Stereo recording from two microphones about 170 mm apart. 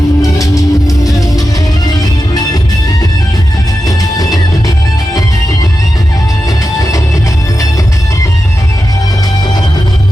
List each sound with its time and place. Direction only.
0.2 s music: 20° left (ahead or behind)
3.8 s music: 20° left (ahead or behind)